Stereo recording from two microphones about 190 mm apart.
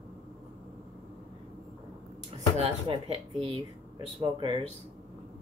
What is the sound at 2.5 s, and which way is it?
Speech, 30° right (ahead or behind).